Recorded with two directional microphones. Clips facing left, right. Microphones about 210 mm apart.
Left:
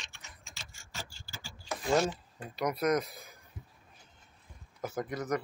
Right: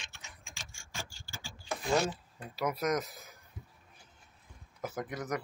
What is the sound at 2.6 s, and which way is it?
Speech, 5° right (ahead or behind).